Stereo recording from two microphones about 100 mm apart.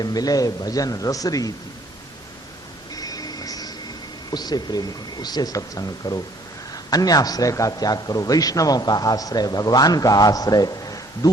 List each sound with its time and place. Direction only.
0.0 s a man's voice: 40° left (ahead or behind)
2.9 s music: 40° left (ahead or behind)
4.3 s a man's voice: 40° left (ahead or behind)